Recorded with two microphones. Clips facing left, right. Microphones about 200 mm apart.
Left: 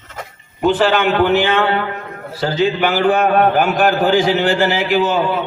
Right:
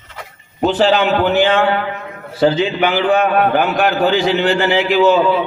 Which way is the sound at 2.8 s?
50° left (ahead or behind).